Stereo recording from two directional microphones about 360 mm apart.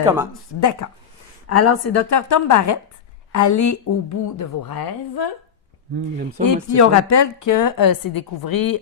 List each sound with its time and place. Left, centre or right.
0.6 s a woman's voice: left
1.5 s a woman's voice: left
4.7 s a woman's voice: left
6.4 s a woman's voice: left